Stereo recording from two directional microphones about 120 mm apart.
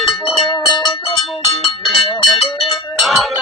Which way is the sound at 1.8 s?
Centre (ahead or behind).